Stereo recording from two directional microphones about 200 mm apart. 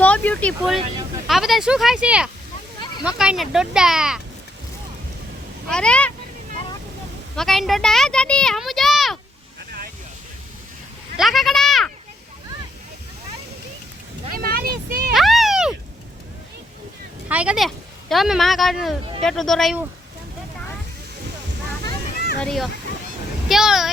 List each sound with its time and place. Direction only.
0.0 s speech: 5° left (ahead or behind)
5.6 s speech: 5° left (ahead or behind)
7.3 s a child's voice: centre (ahead or behind)
11.2 s sheep: centre (ahead or behind)
14.3 s a sound: 50° right (ahead or behind)
15.1 s a sound: centre (ahead or behind)
17.2 s speech: 5° right (ahead or behind)
22.4 s speech: centre (ahead or behind)